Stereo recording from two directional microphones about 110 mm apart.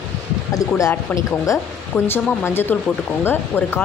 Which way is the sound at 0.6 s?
30° left (ahead or behind).